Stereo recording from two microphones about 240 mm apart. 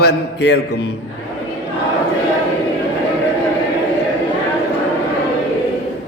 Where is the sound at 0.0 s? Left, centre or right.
Left.